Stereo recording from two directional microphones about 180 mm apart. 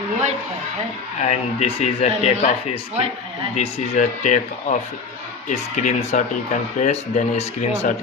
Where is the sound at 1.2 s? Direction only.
40° left (ahead or behind).